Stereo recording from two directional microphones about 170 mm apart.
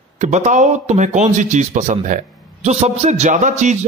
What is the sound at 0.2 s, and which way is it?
Speech, 45° right (ahead or behind).